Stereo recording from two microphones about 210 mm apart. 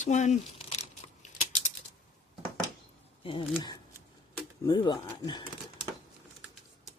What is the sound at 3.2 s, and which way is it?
Speech, 25° left (ahead or behind).